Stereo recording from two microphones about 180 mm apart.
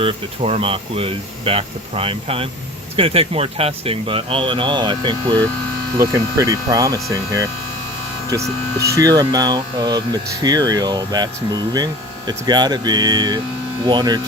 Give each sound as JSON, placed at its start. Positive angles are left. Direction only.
{"t": 0.0, "sound": "speech", "side_deg": -30}